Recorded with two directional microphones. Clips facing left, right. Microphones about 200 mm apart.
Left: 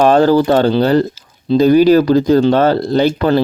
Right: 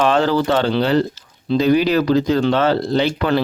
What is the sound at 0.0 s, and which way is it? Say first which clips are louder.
Speech: left 6 dB; 40° left (ahead or behind).